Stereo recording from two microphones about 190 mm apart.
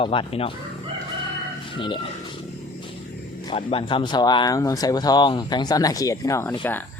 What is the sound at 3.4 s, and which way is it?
Speech, 30° left (ahead or behind).